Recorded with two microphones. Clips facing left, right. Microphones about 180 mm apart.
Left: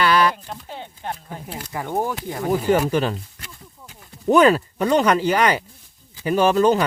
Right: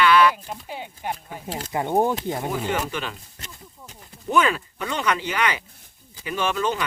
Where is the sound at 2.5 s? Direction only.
40° left (ahead or behind).